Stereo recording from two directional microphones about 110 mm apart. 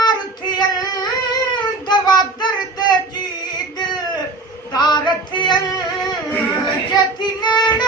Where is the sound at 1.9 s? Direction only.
40° left (ahead or behind).